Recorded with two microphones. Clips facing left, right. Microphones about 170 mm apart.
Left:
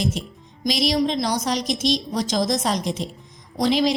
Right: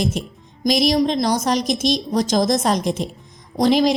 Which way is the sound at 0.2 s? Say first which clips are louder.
Right 4 dB; 50° right (ahead or behind).